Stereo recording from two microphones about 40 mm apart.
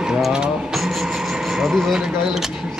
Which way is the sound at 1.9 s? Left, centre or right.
Centre.